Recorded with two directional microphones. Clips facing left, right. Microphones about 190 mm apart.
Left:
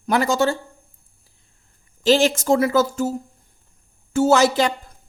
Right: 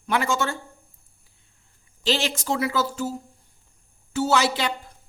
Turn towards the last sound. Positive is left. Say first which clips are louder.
# left 6 dB
turn(degrees=45)  # may be behind; listen again after turning